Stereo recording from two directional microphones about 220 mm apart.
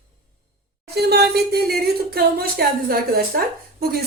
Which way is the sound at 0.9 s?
50° right (ahead or behind).